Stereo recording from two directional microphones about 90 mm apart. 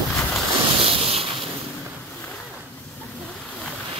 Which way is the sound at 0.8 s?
90° right.